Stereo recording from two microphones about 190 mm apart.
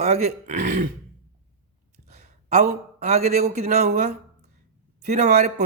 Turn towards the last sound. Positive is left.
turn(degrees=-40)  # may be behind; listen again after turning